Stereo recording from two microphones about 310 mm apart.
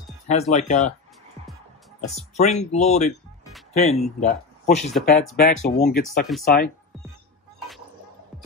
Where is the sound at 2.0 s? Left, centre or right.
Left.